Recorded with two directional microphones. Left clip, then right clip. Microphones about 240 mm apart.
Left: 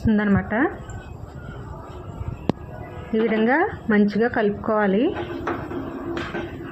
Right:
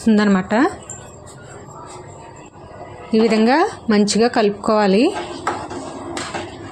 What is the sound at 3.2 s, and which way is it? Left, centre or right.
A woman's voice, right.